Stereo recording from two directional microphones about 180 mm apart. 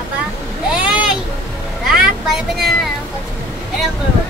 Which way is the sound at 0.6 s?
5° right (ahead or behind).